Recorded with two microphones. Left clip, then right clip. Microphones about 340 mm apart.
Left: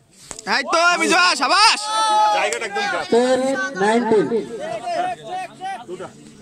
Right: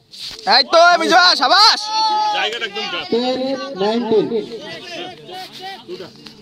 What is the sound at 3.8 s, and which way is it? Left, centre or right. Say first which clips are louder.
Speech: even; centre.